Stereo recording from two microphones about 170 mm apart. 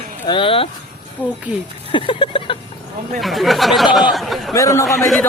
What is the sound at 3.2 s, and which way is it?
Speech, centre (ahead or behind).